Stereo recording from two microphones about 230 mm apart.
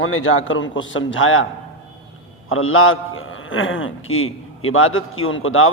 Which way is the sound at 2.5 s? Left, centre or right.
Left.